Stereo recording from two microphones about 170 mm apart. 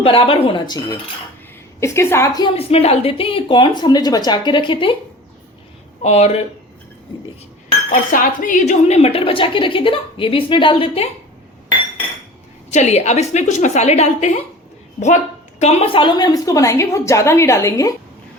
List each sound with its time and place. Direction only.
0.0 s a woman's voice: 30° left (ahead or behind)
2.6 s a woman's voice: 35° left (ahead or behind)
6.0 s speech: 40° left (ahead or behind)
7.9 s speech: 50° left (ahead or behind); by 11.1 s 35° left (ahead or behind)
12.7 s speech: 40° left (ahead or behind)
15.5 s a woman's voice: 35° left (ahead or behind); by 17.9 s 20° left (ahead or behind)